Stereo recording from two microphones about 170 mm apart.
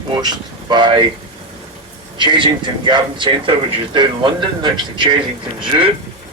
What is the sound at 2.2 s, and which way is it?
Speech, 30° right (ahead or behind).